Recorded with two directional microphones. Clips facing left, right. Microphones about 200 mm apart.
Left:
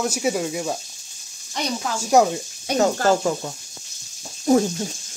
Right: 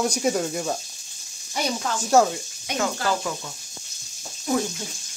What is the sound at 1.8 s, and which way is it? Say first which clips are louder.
Speech: left 2 dB; 10° left (ahead or behind).